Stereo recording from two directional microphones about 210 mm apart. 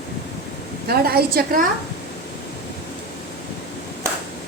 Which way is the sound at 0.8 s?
45° right (ahead or behind).